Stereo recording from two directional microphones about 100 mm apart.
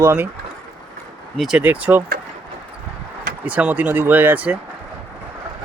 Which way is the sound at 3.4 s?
15° right (ahead or behind).